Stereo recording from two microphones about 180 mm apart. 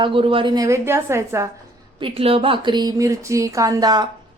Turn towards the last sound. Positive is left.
turn(degrees=-20)  # may be behind; listen again after turning